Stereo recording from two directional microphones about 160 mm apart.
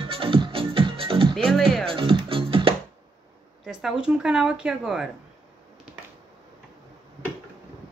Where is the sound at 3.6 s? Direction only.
5° right (ahead or behind).